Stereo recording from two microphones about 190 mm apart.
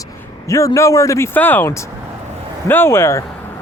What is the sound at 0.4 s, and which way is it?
Speech, 15° left (ahead or behind).